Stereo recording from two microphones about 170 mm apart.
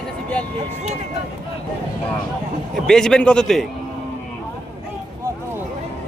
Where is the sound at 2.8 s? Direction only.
5° left (ahead or behind).